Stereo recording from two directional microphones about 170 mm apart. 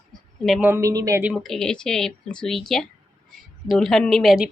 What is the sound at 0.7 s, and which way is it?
Speech, 20° right (ahead or behind).